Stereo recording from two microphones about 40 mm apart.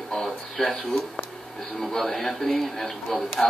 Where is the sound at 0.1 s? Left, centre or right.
Centre.